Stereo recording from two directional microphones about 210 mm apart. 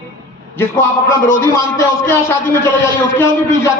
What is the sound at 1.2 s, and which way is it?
A man's voice, 10° left (ahead or behind).